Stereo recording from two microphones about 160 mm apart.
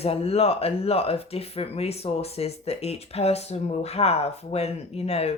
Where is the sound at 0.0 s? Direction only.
40° left (ahead or behind).